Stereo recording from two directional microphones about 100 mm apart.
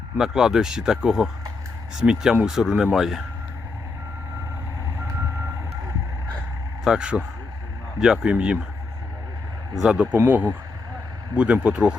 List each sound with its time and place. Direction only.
0.2 s speech: 5° right (ahead or behind)
6.8 s speech: 10° right (ahead or behind)
9.9 s speech: 10° right (ahead or behind)